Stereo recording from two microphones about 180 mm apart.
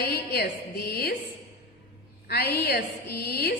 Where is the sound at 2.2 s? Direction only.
60° left (ahead or behind).